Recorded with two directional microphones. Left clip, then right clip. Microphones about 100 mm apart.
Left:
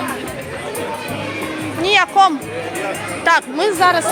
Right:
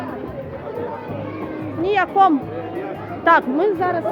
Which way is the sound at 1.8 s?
60° right (ahead or behind).